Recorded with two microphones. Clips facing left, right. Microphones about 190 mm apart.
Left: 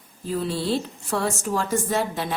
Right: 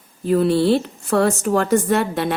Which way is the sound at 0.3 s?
65° right (ahead or behind).